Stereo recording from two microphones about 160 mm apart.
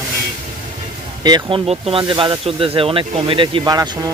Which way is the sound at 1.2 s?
30° right (ahead or behind).